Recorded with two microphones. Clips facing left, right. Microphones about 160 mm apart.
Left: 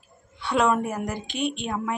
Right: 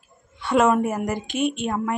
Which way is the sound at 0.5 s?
5° right (ahead or behind).